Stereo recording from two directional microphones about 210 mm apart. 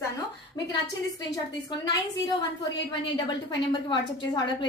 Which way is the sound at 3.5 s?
20° left (ahead or behind).